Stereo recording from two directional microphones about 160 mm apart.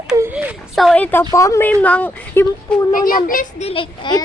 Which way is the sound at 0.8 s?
5° left (ahead or behind).